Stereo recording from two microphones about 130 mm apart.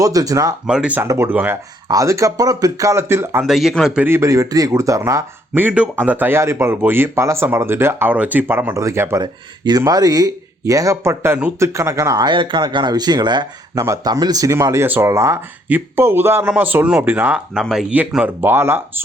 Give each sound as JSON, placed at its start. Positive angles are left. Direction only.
{"t": 0.0, "sound": "speech", "side_deg": -25}
{"t": 0.7, "sound": "speech", "side_deg": -10}
{"t": 1.0, "sound": "speech", "side_deg": -20}
{"t": 1.9, "sound": "speech", "side_deg": -25}
{"t": 3.4, "sound": "a man's voice", "side_deg": -5}
{"t": 4.0, "sound": "speech", "side_deg": -20}
{"t": 5.5, "sound": "speech", "side_deg": -10}
{"t": 9.2, "sound": "speech", "side_deg": -30}